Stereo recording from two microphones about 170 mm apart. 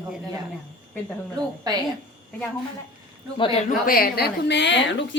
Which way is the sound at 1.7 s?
20° right (ahead or behind).